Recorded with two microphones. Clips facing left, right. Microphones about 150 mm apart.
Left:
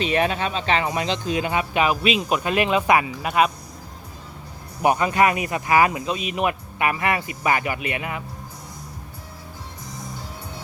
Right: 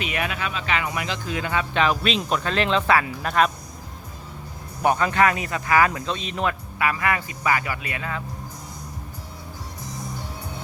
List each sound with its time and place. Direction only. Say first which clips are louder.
0.0 s speech: left 6 dB; 30° left (ahead or behind); by 3.5 s 10° left (ahead or behind)
4.8 s speech: left 1 dB; 10° left (ahead or behind)